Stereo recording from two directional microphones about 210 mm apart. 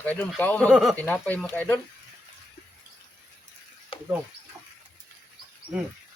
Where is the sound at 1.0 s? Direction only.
10° left (ahead or behind).